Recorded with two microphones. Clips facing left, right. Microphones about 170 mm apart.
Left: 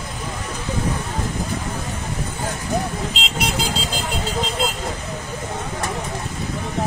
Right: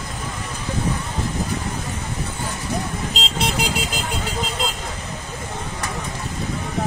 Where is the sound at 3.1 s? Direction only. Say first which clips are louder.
Right 1 dB; 35° right (ahead or behind).